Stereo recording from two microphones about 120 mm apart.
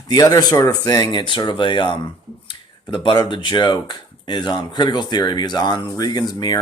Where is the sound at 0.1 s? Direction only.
35° left (ahead or behind).